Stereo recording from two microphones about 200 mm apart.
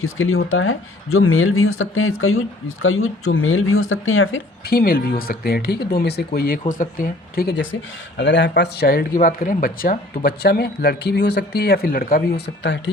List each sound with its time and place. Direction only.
0.0 s speech: 90° left
4.7 s speech: 50° left (ahead or behind)
12.6 s speech: 65° left (ahead or behind)